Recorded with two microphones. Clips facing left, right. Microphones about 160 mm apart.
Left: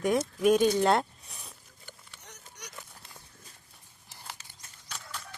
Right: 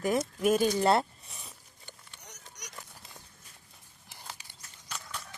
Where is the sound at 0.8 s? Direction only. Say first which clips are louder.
Even; centre (ahead or behind).